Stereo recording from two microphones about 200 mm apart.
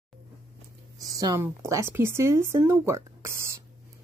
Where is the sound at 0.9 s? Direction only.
15° right (ahead or behind).